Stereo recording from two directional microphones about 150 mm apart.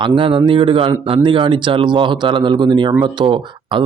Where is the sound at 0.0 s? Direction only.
35° right (ahead or behind).